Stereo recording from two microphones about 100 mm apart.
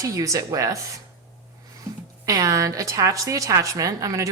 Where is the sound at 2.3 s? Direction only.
35° right (ahead or behind).